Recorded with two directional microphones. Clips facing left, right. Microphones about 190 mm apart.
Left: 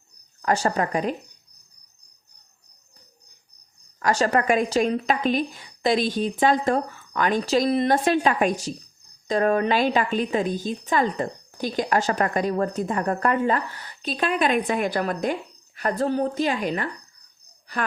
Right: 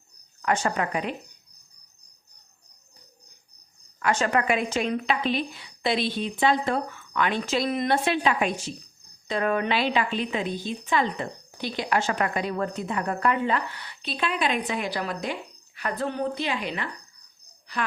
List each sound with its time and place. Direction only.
0.4 s speech: 35° left (ahead or behind)
4.0 s a woman's voice: 40° left (ahead or behind)